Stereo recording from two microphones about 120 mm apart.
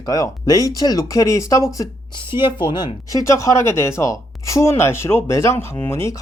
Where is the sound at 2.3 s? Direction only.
45° left (ahead or behind).